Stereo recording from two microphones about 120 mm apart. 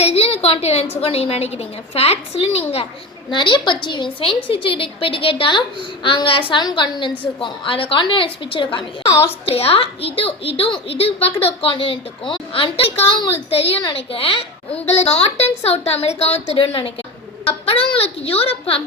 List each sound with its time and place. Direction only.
0.0 s a child's voice: 55° left (ahead or behind)
3.2 s a woman's voice: 40° left (ahead or behind)
7.1 s a woman's voice: 10° left (ahead or behind)
7.4 s a child's voice: 45° left (ahead or behind)